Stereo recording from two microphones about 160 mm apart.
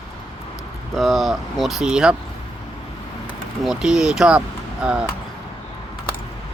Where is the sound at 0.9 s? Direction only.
Centre (ahead or behind).